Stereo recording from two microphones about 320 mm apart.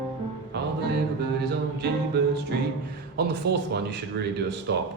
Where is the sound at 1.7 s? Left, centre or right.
Right.